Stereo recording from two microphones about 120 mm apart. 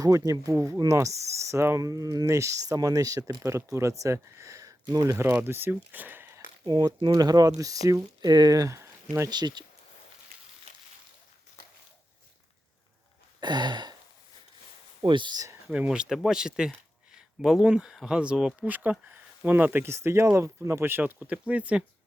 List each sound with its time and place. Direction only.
0.0 s speech: 30° right (ahead or behind)
6.7 s speech: 35° right (ahead or behind)
8.2 s speech: 35° right (ahead or behind)
9.3 s speech: 35° right (ahead or behind)
10.7 s a sound: 60° right (ahead or behind)
13.4 s a sound: 40° right (ahead or behind)
15.0 s speech: 40° right (ahead or behind)
15.6 s speech: 5° right (ahead or behind)